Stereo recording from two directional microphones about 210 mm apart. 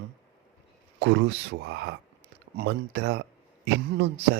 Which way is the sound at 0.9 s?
60° right (ahead or behind).